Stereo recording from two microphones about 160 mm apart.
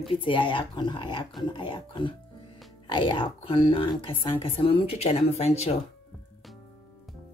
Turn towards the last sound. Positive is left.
turn(degrees=40)  # may be behind; listen again after turning